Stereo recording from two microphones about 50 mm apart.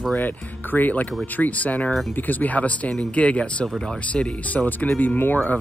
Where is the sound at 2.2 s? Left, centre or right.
Left.